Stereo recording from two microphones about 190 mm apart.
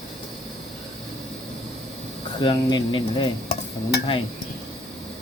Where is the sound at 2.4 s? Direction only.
25° left (ahead or behind).